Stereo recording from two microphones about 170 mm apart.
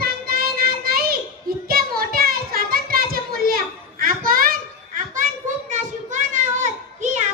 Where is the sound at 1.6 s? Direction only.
60° right (ahead or behind).